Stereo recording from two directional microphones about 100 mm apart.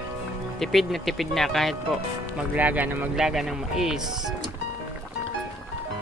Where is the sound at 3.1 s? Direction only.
5° right (ahead or behind).